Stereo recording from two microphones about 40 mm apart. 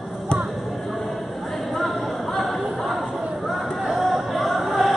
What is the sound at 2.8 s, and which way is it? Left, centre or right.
Chatter, centre.